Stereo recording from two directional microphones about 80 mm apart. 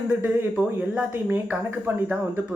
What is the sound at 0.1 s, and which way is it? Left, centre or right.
Speech, right.